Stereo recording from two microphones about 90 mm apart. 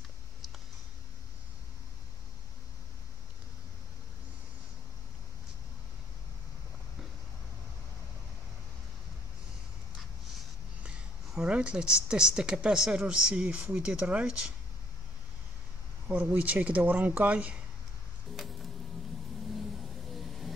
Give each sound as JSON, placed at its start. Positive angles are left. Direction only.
{"t": 11.3, "sound": "speech", "side_deg": -10}
{"t": 16.1, "sound": "speech", "side_deg": -20}
{"t": 18.3, "sound": "music", "side_deg": 0}
{"t": 20.2, "sound": "vehicle", "side_deg": 0}